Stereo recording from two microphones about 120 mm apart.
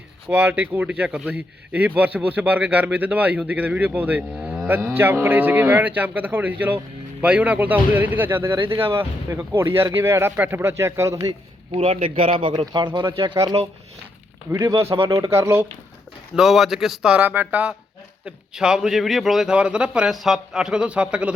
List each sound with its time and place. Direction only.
0.3 s speech: 15° right (ahead or behind)
11.2 s speech: 40° right (ahead or behind)
15.1 s speech: 25° right (ahead or behind)
16.3 s speech: 5° right (ahead or behind)